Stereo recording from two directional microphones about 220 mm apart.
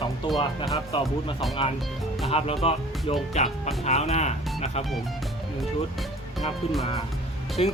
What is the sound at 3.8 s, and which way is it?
Speech, 30° left (ahead or behind).